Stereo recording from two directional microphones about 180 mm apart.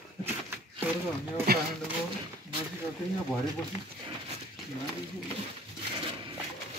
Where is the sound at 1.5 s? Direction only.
60° right (ahead or behind).